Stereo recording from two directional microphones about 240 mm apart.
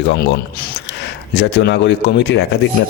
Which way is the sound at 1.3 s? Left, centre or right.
Left.